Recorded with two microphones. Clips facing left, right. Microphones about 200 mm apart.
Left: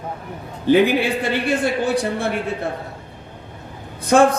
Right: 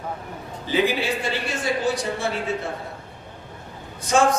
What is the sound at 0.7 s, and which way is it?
A man's voice, 60° left (ahead or behind).